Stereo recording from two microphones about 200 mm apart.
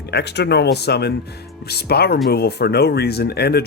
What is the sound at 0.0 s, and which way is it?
Speech, 55° left (ahead or behind).